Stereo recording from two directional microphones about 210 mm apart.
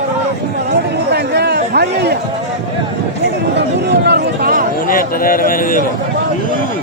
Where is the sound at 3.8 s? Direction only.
50° right (ahead or behind).